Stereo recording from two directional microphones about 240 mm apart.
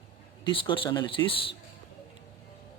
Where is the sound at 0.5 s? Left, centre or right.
Left.